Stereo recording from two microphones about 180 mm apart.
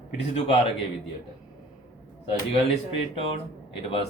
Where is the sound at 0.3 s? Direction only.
35° left (ahead or behind).